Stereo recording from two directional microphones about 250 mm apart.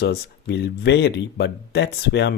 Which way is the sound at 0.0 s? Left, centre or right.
Left.